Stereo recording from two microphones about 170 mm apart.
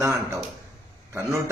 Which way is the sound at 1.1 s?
15° right (ahead or behind).